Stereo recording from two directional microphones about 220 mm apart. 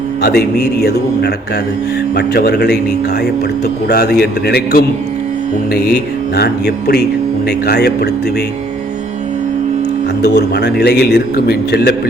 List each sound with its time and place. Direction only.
0.2 s a man's voice: 45° left (ahead or behind)
3.8 s a man's voice: 45° left (ahead or behind)
10.2 s a man's voice: 50° left (ahead or behind)